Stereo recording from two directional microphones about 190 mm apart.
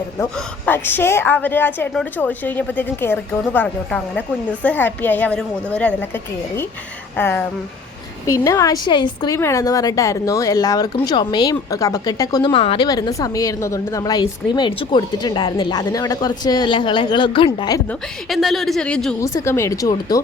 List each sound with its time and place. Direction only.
0.2 s a woman's voice: 10° left (ahead or behind)
7.2 s a woman's voice: 10° left (ahead or behind)
18.3 s speech: centre (ahead or behind)
19.2 s a woman's voice: 15° left (ahead or behind)